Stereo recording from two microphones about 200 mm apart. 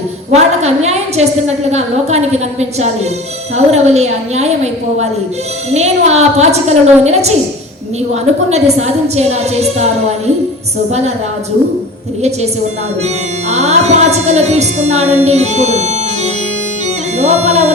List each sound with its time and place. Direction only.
0.3 s a woman's voice: 35° right (ahead or behind)
13.5 s a woman's voice: 35° right (ahead or behind)